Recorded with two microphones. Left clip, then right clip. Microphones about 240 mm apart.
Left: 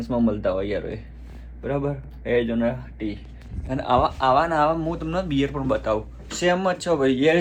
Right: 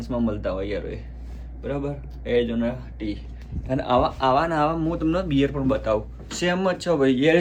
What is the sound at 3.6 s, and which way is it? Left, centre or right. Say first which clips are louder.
Speech: even; centre.